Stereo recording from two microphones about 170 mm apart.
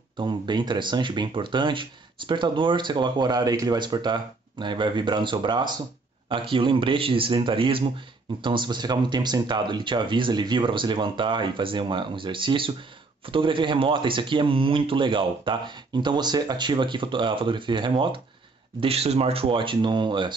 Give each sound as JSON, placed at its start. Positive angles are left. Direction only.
{"t": 0.2, "sound": "a man's voice", "side_deg": -25}